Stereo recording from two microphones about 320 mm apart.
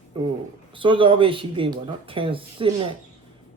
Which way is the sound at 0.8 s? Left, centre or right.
Centre.